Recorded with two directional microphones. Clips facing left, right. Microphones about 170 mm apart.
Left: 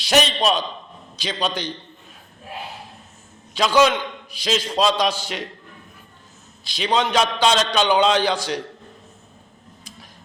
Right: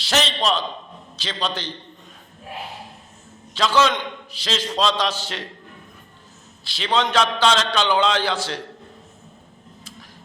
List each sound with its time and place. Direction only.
0.0 s a man's voice: 15° left (ahead or behind)
3.5 s a man's voice: 15° left (ahead or behind)
6.7 s a man's voice: 15° left (ahead or behind)